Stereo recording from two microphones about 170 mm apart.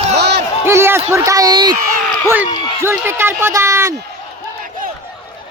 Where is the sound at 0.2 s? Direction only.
85° right.